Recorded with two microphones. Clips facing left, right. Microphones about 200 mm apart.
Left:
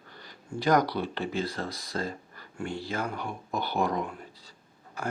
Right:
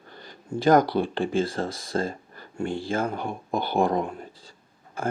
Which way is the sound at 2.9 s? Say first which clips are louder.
Right 5 dB; 25° right (ahead or behind).